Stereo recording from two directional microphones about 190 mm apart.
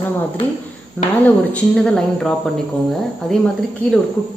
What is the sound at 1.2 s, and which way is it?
Speech, 5° left (ahead or behind).